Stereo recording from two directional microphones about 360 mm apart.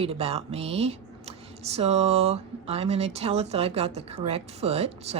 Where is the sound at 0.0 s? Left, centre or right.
Centre.